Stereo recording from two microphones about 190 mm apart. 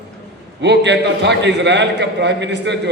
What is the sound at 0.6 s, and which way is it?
A man's voice, 65° right (ahead or behind).